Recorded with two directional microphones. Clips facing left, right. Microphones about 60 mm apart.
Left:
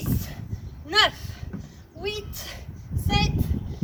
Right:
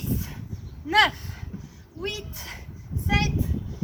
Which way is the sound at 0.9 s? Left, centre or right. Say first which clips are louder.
Right 2 dB; right.